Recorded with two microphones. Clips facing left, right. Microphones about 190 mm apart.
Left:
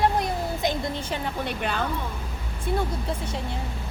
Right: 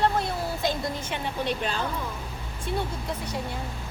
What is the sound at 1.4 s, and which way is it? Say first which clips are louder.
Speech: even; 60° left (ahead or behind).